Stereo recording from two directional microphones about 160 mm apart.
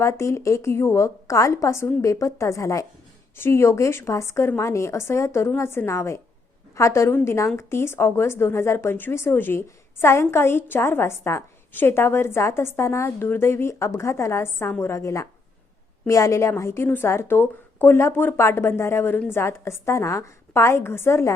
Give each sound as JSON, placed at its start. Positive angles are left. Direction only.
{"t": 0.0, "sound": "a woman's voice", "side_deg": 15}